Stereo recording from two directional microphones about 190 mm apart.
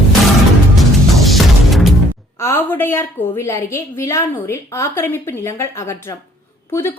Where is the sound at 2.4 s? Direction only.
10° left (ahead or behind).